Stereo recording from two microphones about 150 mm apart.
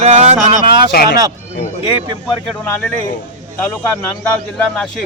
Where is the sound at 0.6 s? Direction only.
30° right (ahead or behind).